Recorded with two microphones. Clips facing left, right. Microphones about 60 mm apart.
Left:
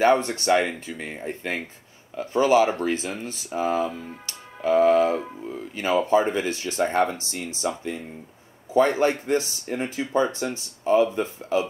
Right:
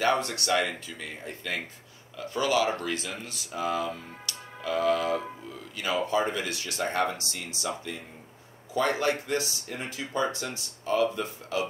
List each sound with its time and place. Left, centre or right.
0.0 s speech: left
3.9 s music: left
5.5 s speech: left
8.7 s speech: left